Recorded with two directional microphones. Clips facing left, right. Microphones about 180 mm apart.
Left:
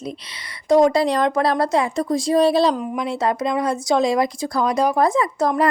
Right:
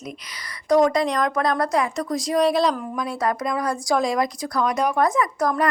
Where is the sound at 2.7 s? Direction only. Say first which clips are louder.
Left 4 dB; 20° left (ahead or behind).